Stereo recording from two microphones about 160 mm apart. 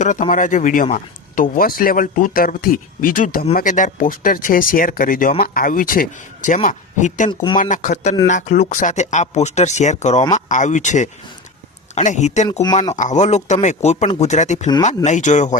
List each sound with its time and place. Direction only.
0.0 s speech: 50° left (ahead or behind)